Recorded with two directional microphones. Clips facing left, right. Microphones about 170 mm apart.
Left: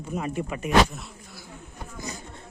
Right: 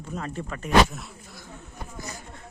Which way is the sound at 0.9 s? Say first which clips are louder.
Even; centre (ahead or behind).